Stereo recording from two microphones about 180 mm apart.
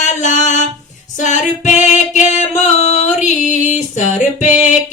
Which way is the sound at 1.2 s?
45° left (ahead or behind).